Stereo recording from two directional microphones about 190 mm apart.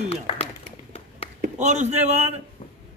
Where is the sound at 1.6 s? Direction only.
35° right (ahead or behind).